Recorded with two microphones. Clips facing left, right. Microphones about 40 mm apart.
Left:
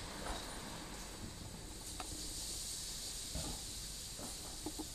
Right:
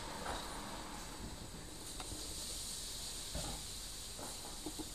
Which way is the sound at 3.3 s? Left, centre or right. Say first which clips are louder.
Right 1 dB; centre.